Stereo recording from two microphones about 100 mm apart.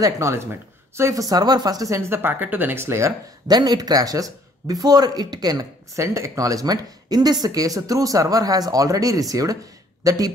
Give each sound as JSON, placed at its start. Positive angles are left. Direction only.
{"t": 0.0, "sound": "speech", "side_deg": -25}
{"t": 3.4, "sound": "speech", "side_deg": -45}